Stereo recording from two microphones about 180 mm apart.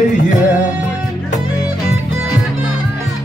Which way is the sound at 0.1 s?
45° left (ahead or behind).